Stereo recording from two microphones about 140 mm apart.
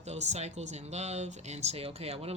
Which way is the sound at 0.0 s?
55° right (ahead or behind).